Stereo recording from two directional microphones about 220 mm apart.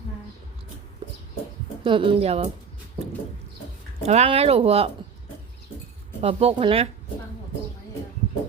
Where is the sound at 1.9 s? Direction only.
25° right (ahead or behind).